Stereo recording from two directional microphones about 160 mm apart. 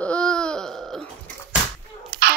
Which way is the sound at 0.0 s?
5° left (ahead or behind).